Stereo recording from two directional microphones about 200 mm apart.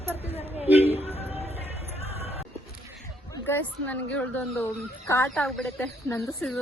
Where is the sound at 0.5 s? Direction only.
30° left (ahead or behind).